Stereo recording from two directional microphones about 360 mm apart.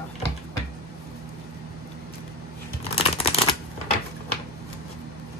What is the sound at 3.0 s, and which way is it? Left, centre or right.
Shuffling cards, centre.